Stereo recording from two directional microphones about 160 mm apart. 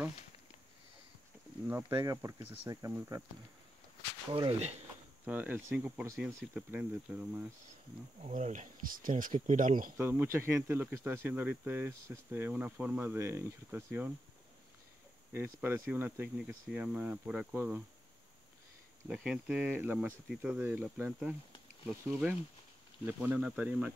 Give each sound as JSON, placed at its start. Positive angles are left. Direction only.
{"t": 1.7, "sound": "speech", "side_deg": -15}
{"t": 4.3, "sound": "speech", "side_deg": -35}
{"t": 5.2, "sound": "speech", "side_deg": -10}
{"t": 8.2, "sound": "speech", "side_deg": -45}
{"t": 9.9, "sound": "speech", "side_deg": -15}
{"t": 15.3, "sound": "speech", "side_deg": -15}
{"t": 19.0, "sound": "speech", "side_deg": -5}